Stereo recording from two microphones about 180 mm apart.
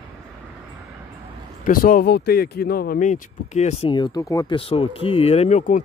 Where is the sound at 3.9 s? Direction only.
20° left (ahead or behind).